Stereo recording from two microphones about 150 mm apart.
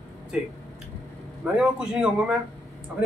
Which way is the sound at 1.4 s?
5° right (ahead or behind).